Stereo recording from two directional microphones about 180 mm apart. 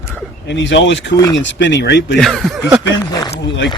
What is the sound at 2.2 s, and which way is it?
Speech, centre (ahead or behind).